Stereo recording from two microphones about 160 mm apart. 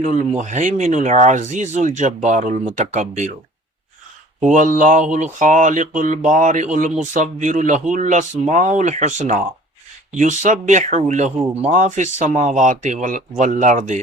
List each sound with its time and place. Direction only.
0.0 s speech: 50° right (ahead or behind)
4.4 s speech: 50° right (ahead or behind)